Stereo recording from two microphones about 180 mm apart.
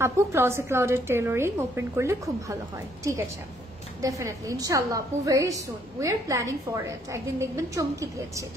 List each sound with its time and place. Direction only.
0.0 s a woman's voice: 15° right (ahead or behind)